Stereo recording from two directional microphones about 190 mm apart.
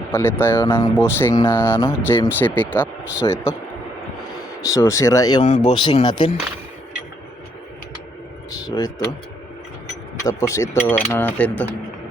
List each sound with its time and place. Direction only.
0.1 s speech: 10° left (ahead or behind)
3.2 s speech: 20° left (ahead or behind)
4.6 s speech: 15° left (ahead or behind)
8.6 s speech: 20° left (ahead or behind)
10.2 s speech: 15° left (ahead or behind)